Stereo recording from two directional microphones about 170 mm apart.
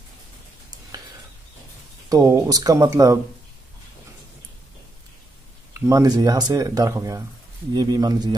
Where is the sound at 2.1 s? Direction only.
20° right (ahead or behind).